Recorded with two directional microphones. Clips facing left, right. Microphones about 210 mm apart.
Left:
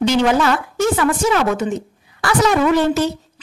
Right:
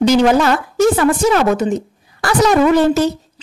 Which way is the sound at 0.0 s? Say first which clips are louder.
Right 4 dB; 40° right (ahead or behind).